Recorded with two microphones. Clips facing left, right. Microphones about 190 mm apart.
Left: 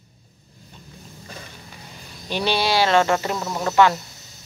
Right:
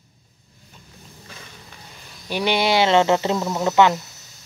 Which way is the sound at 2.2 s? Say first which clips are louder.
Right 2 dB; 15° right (ahead or behind).